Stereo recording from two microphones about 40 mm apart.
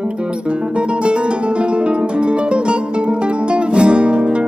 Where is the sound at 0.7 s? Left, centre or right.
Right.